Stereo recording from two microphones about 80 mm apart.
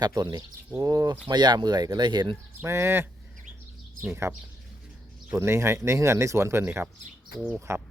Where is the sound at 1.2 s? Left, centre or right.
Right.